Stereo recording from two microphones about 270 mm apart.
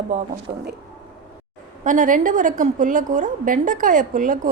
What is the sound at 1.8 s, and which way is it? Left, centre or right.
A woman's voice, right.